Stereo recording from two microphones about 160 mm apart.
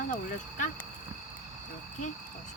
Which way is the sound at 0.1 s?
50° left (ahead or behind).